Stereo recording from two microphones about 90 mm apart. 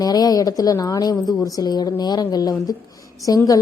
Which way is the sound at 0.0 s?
45° left (ahead or behind).